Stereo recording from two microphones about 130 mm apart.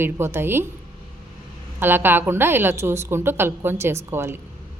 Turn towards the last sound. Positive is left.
turn(degrees=-20)  # may be behind; listen again after turning